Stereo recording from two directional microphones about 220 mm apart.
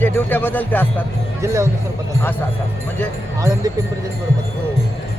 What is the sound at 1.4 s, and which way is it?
Speech, 15° right (ahead or behind).